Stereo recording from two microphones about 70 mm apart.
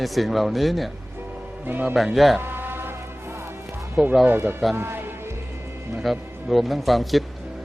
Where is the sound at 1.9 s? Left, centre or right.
Centre.